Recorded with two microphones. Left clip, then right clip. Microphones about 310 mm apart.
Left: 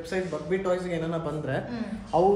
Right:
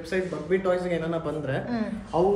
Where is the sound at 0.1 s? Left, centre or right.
Left.